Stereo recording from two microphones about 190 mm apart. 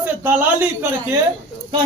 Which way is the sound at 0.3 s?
10° right (ahead or behind).